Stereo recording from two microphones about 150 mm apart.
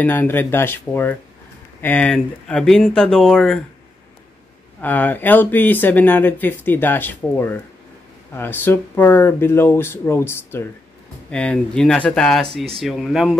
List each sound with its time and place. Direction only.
0.0 s speech: 15° left (ahead or behind)
4.8 s speech: 10° left (ahead or behind)